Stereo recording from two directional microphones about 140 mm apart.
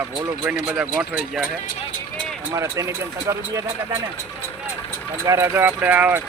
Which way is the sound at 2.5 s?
20° right (ahead or behind).